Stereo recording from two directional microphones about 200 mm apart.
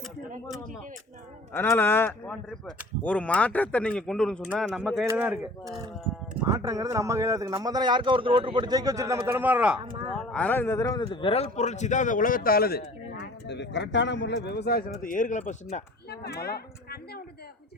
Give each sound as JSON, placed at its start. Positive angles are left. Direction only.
{"t": 1.5, "sound": "a man's voice", "side_deg": 10}
{"t": 10.2, "sound": "a man's voice", "side_deg": 5}
{"t": 16.4, "sound": "speech", "side_deg": 50}